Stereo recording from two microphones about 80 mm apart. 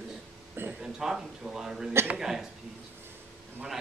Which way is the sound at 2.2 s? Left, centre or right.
Centre.